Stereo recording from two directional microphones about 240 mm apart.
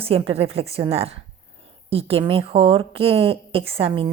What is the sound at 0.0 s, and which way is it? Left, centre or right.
Speech, right.